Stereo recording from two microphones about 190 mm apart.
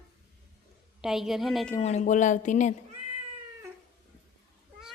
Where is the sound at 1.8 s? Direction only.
40° left (ahead or behind).